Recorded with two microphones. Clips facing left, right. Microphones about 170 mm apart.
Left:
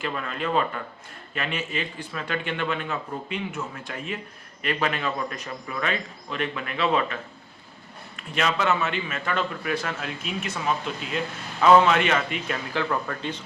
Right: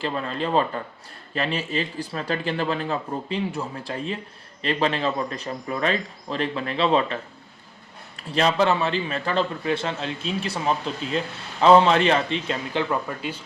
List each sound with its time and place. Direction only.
0.0 s a man's voice: 30° right (ahead or behind); by 13.4 s 10° right (ahead or behind)